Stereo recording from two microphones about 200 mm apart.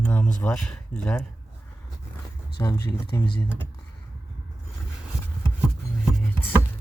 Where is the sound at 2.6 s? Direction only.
15° left (ahead or behind).